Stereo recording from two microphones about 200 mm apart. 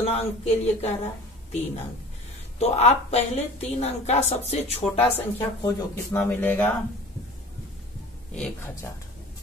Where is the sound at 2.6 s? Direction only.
30° left (ahead or behind).